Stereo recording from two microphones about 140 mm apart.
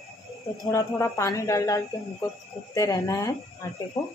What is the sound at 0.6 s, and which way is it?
Speech, 25° left (ahead or behind).